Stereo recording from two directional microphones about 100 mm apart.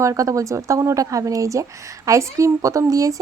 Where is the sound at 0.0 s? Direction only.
35° right (ahead or behind).